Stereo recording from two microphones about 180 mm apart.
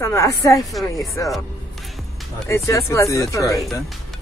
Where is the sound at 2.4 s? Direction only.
15° left (ahead or behind).